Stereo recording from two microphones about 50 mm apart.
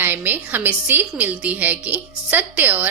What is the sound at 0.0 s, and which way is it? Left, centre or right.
A woman's voice, right.